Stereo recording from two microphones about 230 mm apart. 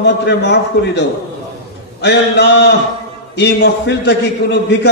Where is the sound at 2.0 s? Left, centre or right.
Left.